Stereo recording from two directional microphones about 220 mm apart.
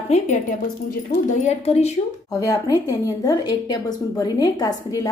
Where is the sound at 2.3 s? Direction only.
15° left (ahead or behind).